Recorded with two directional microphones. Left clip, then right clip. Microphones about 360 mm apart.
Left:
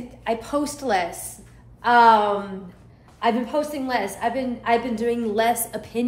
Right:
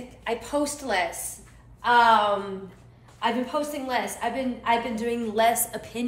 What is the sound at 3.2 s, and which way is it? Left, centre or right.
A woman's voice, centre.